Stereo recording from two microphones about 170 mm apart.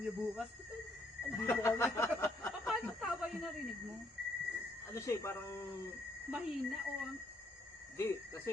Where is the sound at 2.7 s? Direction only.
Centre (ahead or behind).